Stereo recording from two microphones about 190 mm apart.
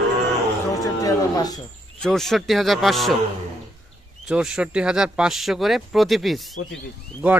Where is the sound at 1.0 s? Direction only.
20° left (ahead or behind).